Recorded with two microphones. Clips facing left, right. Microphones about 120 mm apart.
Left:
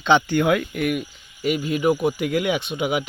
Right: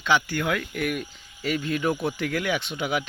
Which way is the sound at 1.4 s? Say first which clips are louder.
Left 4 dB; 15° left (ahead or behind).